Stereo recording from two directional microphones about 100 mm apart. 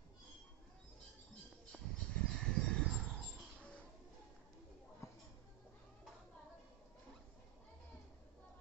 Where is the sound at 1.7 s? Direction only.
10° left (ahead or behind).